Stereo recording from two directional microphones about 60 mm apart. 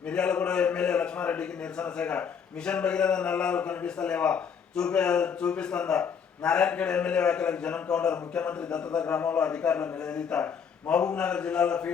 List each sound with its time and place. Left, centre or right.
0.1 s a man's voice: centre